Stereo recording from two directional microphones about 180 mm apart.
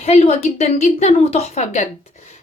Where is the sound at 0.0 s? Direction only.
35° left (ahead or behind).